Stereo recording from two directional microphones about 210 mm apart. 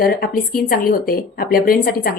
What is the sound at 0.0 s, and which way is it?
Speech, 45° left (ahead or behind).